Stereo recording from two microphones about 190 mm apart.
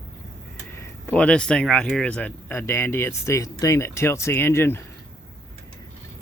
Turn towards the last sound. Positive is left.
turn(degrees=15)  # may be behind; listen again after turning